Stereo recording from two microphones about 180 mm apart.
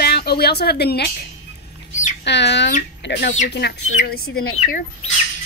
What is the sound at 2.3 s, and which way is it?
Speech, 75° left (ahead or behind).